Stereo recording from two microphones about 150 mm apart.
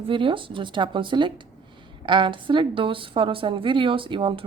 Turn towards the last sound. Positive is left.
turn(degrees=-35)  # may be behind; listen again after turning